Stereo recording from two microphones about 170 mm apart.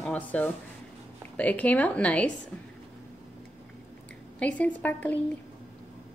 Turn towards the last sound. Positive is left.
turn(degrees=10)  # may be behind; listen again after turning